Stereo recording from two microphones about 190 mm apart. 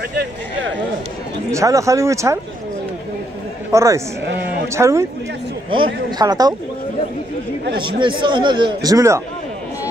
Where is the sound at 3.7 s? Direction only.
15° right (ahead or behind).